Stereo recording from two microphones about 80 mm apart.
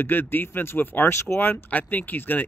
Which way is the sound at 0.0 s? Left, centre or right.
Left.